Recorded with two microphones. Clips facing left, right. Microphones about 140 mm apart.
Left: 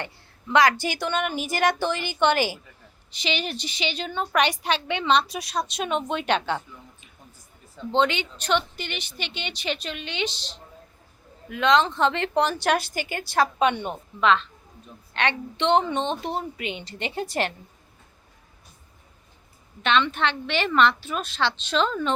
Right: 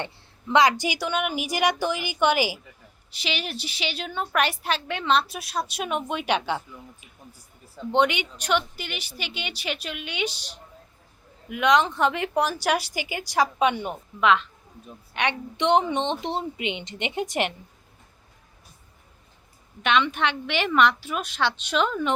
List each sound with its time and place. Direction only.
0.0 s a woman's voice: 20° right (ahead or behind)
19.8 s speech: 10° right (ahead or behind)